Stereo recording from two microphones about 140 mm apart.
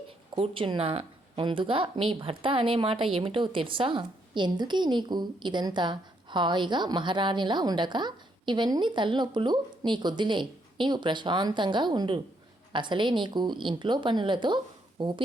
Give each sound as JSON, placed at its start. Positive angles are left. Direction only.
{"t": 0.3, "sound": "speech", "side_deg": -40}